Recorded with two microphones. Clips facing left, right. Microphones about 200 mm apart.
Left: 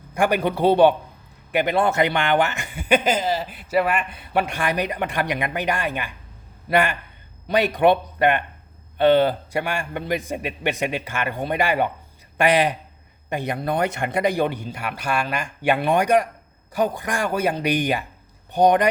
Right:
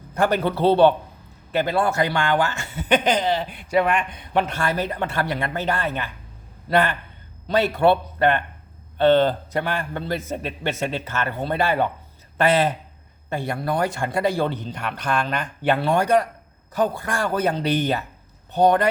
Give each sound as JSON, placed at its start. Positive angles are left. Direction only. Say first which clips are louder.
{"t": 0.1, "sound": "speech", "louder": "even", "side_deg": 10}